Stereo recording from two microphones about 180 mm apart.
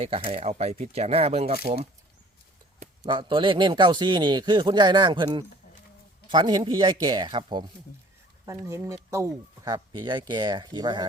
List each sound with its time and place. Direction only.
0.0 s speech: 35° right (ahead or behind)
3.0 s speech: 25° right (ahead or behind)